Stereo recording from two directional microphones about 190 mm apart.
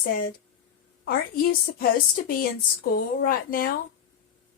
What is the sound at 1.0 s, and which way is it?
A woman's voice, 50° left (ahead or behind).